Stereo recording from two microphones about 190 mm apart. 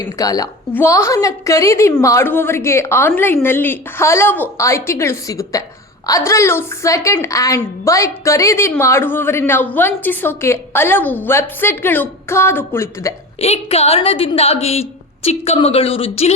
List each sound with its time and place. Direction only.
0.0 s a woman's voice: 20° left (ahead or behind)
13.4 s a woman's voice: 35° left (ahead or behind)